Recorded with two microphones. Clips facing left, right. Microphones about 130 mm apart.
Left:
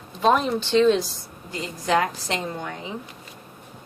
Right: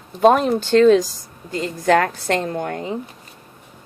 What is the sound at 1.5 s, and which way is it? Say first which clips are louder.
A woman's voice: right 6 dB; 55° right (ahead or behind).